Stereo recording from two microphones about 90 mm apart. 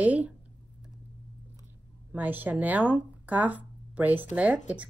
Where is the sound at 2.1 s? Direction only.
20° right (ahead or behind).